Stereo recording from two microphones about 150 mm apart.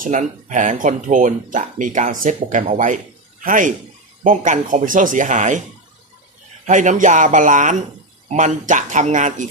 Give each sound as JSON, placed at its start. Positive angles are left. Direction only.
{"t": 0.0, "sound": "speech", "side_deg": -55}
{"t": 6.7, "sound": "speech", "side_deg": -55}